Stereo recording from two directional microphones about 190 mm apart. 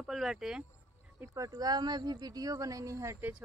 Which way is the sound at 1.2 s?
15° right (ahead or behind).